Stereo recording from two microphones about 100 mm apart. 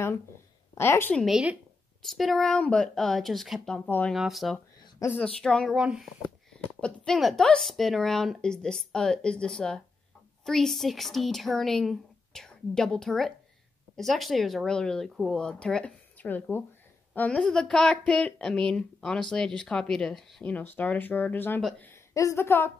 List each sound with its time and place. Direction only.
0.7 s a woman's voice: 25° left (ahead or behind)
1.2 s speech: 10° right (ahead or behind); by 4.1 s 10° left (ahead or behind)
4.1 s a woman's voice: centre (ahead or behind)
5.8 s speech: 10° right (ahead or behind)
6.5 s a woman's voice: 5° left (ahead or behind)
17.4 s a woman's voice: 5° left (ahead or behind)
20.5 s a woman's voice: 15° left (ahead or behind)
21.5 s speech: 5° left (ahead or behind)
22.1 s a woman's voice: 30° left (ahead or behind)